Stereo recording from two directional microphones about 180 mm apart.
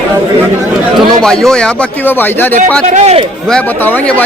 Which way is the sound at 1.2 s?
5° left (ahead or behind).